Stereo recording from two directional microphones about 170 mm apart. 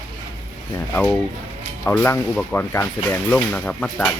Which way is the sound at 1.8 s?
10° left (ahead or behind).